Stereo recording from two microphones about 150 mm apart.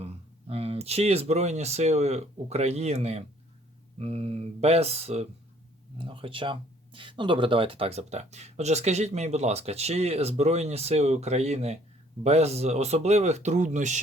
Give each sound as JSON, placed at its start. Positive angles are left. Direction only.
{"t": 0.0, "sound": "speech", "side_deg": -40}